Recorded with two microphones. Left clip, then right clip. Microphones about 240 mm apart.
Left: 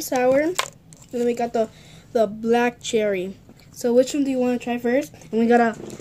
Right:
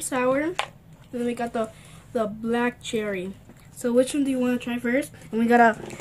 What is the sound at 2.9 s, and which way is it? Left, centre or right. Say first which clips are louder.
Speech: left 6 dB; centre.